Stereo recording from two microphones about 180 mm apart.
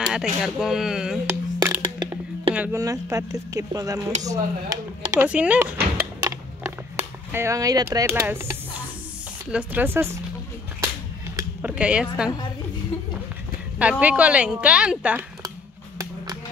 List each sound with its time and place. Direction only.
0.0 s speech: 5° right (ahead or behind)
1.6 s music: 20° right (ahead or behind)
2.5 s speech: 15° right (ahead or behind)
9.5 s a woman's voice: 10° right (ahead or behind)
11.3 s a sound: 10° right (ahead or behind)
13.7 s a woman's voice: 5° right (ahead or behind)